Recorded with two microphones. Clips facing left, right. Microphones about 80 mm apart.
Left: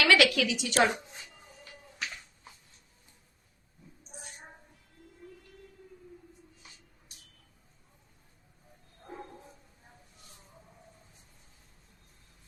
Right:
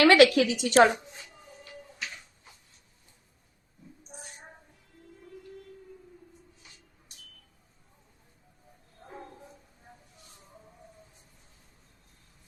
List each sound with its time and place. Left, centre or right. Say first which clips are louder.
0.0 s a woman's voice: right 6 dB; right